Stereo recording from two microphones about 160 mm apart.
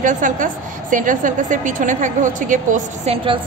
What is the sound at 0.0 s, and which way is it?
A woman's voice, 55° right (ahead or behind).